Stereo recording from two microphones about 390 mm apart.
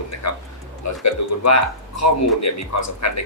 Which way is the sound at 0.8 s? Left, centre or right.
Left.